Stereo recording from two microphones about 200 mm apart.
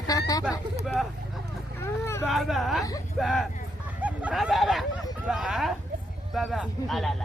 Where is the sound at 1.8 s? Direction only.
15° left (ahead or behind).